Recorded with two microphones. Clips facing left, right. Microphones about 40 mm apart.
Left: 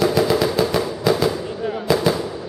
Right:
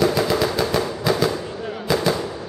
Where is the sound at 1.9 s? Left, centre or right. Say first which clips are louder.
Left 2 dB; centre.